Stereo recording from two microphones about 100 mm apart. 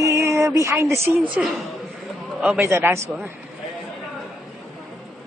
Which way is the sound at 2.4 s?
25° right (ahead or behind).